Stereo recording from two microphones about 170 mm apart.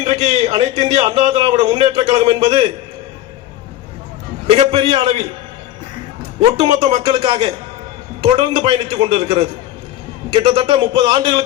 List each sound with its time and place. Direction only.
0.0 s a man's voice: 35° right (ahead or behind)
4.5 s a man's voice: 35° right (ahead or behind)
6.4 s a man's voice: 35° right (ahead or behind)